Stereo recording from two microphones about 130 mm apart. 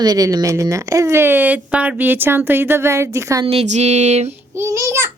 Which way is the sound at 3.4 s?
50° right (ahead or behind).